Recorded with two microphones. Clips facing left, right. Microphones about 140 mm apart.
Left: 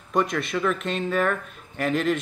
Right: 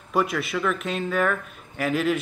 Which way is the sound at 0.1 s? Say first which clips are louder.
Even; 5° right (ahead or behind).